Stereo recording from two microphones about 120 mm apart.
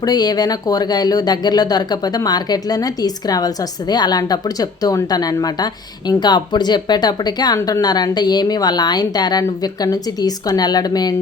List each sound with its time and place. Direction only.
0.0 s speech: 35° left (ahead or behind)